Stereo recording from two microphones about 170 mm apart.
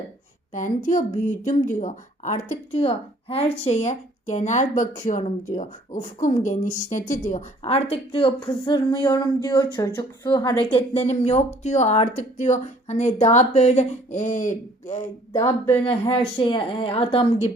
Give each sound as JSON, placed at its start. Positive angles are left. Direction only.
{"t": 0.5, "sound": "a woman's voice", "side_deg": 50}
{"t": 5.9, "sound": "a woman's voice", "side_deg": 50}
{"t": 7.6, "sound": "speech", "side_deg": 35}
{"t": 15.3, "sound": "speech", "side_deg": 15}
{"t": 15.8, "sound": "speech", "side_deg": 30}